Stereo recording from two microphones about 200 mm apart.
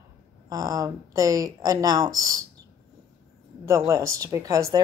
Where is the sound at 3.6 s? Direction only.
15° right (ahead or behind).